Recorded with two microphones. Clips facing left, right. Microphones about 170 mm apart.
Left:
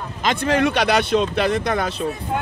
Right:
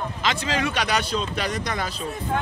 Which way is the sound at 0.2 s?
55° left (ahead or behind).